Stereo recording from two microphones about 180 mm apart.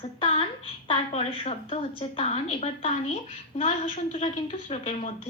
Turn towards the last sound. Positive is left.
turn(degrees=35)  # may be behind; listen again after turning